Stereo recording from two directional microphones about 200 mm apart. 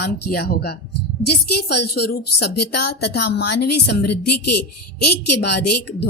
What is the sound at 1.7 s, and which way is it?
Speech, 55° left (ahead or behind).